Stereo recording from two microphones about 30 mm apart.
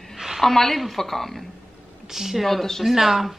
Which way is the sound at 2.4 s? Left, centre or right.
Centre.